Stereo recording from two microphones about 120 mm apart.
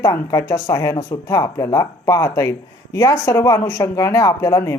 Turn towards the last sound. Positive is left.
turn(degrees=25)  # may be behind; listen again after turning